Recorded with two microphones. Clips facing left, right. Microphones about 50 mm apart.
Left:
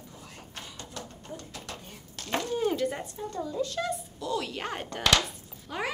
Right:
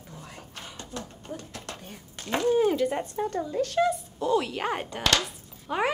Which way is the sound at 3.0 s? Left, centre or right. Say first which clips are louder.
Right 5 dB; right.